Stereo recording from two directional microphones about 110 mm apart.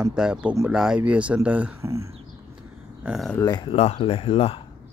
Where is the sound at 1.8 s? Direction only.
25° right (ahead or behind).